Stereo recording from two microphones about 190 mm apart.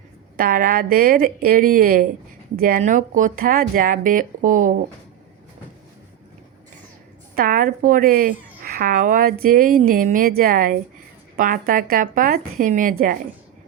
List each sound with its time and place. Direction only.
0.3 s a woman's voice: 50° right (ahead or behind)
7.3 s a woman's voice: 45° right (ahead or behind)